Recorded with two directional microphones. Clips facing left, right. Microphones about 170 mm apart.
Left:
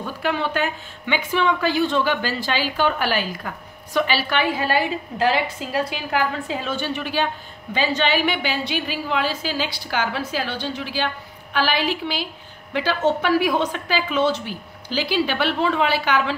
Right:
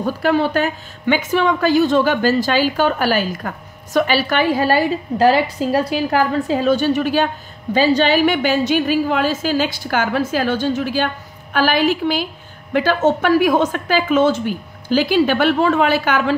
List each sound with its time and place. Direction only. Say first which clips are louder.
0.0 s a woman's voice: right 7 dB; 40° right (ahead or behind)